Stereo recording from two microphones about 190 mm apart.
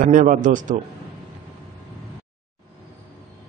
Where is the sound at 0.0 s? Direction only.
45° right (ahead or behind).